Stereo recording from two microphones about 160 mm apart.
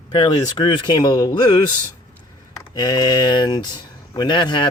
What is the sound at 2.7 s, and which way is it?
Speech, 25° left (ahead or behind).